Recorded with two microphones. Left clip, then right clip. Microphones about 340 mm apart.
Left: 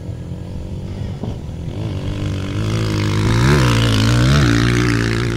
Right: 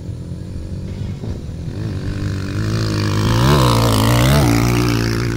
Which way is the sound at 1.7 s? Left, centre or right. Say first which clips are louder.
Left 1 dB; centre.